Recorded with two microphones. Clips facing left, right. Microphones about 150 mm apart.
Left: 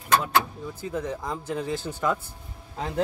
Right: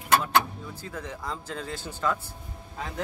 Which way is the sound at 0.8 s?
15° left (ahead or behind).